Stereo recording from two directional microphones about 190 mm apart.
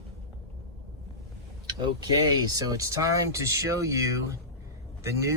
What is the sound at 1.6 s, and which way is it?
Vehicle, 20° right (ahead or behind).